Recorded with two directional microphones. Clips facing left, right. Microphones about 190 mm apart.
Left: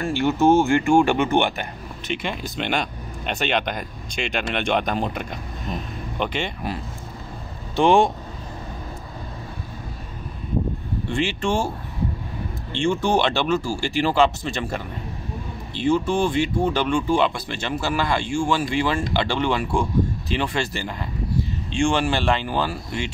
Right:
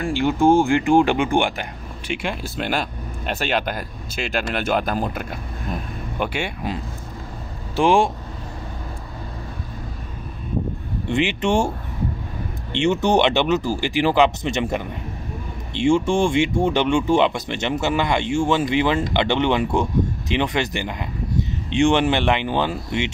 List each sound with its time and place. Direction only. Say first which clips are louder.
0.0 s speech: right 1 dB; 15° right (ahead or behind)
11.1 s speech: right 4 dB; 20° right (ahead or behind)
12.9 s speech: right 4 dB; 20° right (ahead or behind)